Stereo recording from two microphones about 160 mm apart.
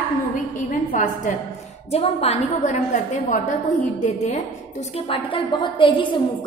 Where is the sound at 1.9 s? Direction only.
40° left (ahead or behind).